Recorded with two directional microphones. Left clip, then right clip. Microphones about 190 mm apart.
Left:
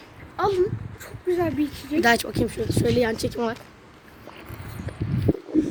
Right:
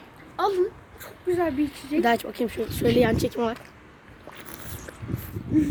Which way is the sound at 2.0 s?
5° right (ahead or behind).